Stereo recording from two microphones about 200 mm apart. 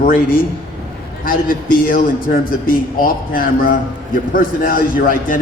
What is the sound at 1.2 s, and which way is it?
A man's voice, 45° left (ahead or behind).